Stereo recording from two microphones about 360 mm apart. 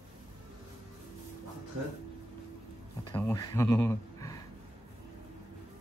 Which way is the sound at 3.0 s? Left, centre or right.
Centre.